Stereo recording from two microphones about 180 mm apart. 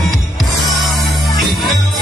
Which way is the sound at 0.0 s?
Centre (ahead or behind).